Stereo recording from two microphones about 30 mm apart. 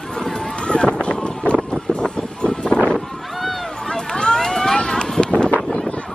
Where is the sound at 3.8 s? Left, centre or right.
Left.